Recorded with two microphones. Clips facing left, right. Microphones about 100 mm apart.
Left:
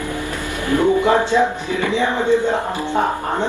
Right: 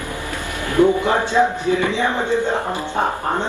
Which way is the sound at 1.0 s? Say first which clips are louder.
Left 2 dB; 20° left (ahead or behind).